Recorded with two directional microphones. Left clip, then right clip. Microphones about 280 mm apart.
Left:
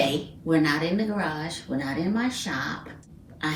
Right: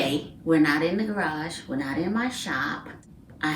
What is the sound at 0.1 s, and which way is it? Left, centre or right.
Speech, centre.